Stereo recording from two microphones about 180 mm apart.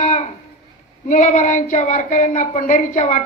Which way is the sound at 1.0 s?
45° left (ahead or behind).